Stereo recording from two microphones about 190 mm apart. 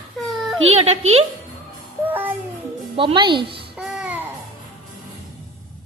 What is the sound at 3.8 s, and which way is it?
Babbling, 5° right (ahead or behind).